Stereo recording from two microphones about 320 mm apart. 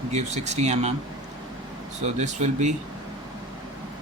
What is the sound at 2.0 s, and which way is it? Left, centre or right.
Speech, right.